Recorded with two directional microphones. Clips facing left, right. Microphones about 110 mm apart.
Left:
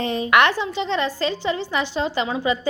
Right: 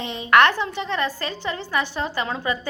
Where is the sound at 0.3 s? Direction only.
15° left (ahead or behind).